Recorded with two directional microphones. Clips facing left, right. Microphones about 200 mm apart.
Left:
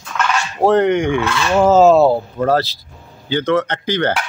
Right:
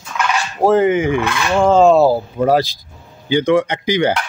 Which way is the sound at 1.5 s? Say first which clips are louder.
Left 1 dB; 5° left (ahead or behind).